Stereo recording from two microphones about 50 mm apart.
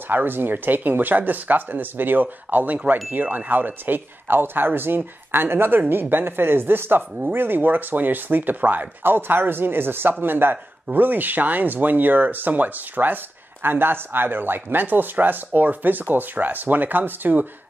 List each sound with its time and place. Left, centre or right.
0.1 s speech: right